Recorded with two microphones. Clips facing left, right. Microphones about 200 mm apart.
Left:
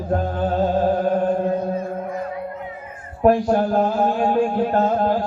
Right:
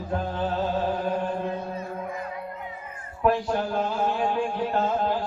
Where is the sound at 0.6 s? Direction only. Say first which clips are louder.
Left 10 dB; 45° left (ahead or behind).